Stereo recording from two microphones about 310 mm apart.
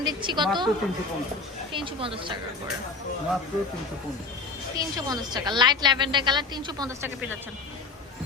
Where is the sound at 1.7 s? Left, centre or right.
Centre.